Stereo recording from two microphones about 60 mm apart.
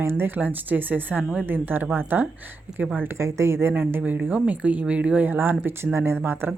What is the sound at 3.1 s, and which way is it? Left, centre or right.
Speech, right.